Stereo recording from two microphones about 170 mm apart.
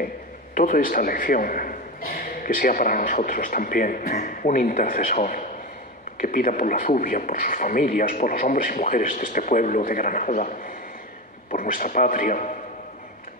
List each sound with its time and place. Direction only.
0.6 s a man's voice: 50° left (ahead or behind)
11.5 s a man's voice: 55° left (ahead or behind)